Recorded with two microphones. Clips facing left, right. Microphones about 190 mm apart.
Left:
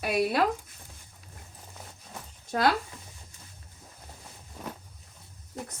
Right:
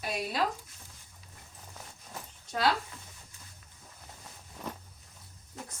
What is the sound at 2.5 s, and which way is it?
Speech, 55° left (ahead or behind).